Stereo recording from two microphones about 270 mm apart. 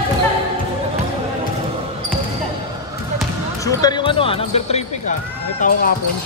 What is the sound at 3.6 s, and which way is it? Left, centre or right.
Speech, centre.